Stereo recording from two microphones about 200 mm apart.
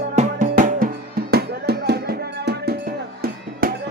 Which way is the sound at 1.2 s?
55° right (ahead or behind).